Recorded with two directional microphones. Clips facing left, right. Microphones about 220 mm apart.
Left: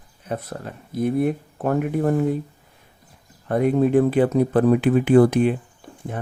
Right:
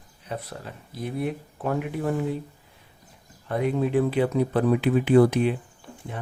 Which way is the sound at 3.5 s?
50° left (ahead or behind).